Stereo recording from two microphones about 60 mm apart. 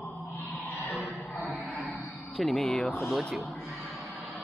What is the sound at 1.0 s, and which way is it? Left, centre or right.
Music, centre.